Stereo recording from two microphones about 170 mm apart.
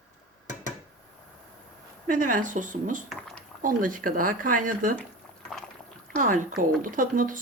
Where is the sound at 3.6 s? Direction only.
55° right (ahead or behind).